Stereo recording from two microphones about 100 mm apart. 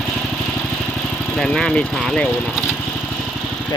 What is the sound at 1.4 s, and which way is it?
Speech, 5° left (ahead or behind).